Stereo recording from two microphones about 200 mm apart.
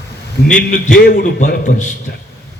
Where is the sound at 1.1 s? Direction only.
45° left (ahead or behind).